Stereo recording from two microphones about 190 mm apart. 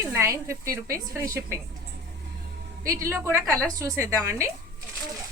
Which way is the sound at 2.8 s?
15° right (ahead or behind).